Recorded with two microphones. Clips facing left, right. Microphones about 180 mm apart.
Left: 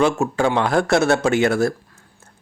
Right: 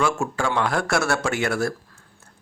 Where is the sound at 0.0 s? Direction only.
20° left (ahead or behind).